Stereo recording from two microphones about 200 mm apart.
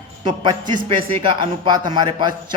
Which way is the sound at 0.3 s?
20° right (ahead or behind).